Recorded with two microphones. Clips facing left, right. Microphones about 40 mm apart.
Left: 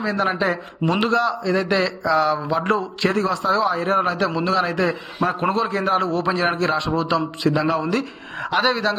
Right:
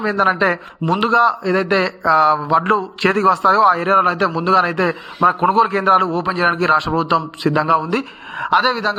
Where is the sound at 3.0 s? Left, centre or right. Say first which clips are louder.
Right 7 dB; right.